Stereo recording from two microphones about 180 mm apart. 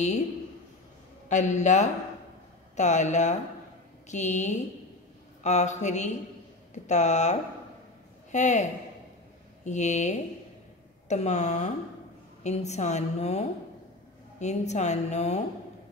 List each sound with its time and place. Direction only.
1.3 s a woman's voice: 40° left (ahead or behind)
9.7 s a woman's voice: 40° left (ahead or behind)